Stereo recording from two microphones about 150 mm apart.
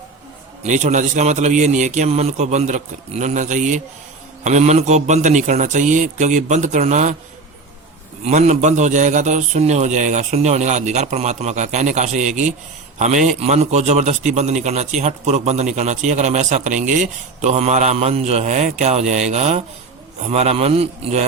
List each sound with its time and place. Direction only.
0.6 s a man's voice: 50° right (ahead or behind)
8.2 s a man's voice: 50° right (ahead or behind)